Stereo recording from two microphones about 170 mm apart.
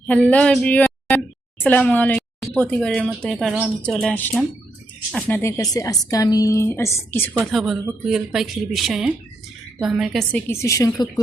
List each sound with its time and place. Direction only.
0.1 s a woman's voice: 10° left (ahead or behind)
7.5 s speech: centre (ahead or behind)
10.5 s a woman's voice: 15° left (ahead or behind)